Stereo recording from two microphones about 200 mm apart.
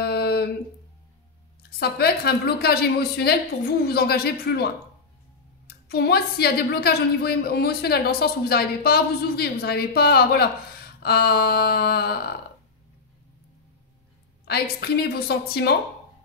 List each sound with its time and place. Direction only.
0.0 s a sound: 55° left (ahead or behind)
1.7 s a woman's voice: 50° left (ahead or behind)
5.7 s a woman's voice: 50° left (ahead or behind)
14.4 s a woman's voice: 50° left (ahead or behind)